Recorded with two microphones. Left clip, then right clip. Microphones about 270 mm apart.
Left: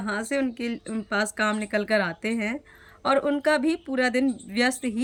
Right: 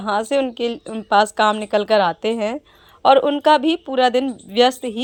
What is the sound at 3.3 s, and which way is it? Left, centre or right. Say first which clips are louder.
Speech: right 8 dB; centre.